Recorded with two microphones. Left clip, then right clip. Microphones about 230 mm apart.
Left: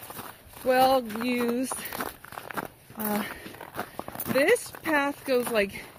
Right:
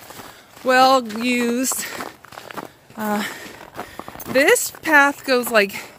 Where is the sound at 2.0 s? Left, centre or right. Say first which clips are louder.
Right 3 dB; left.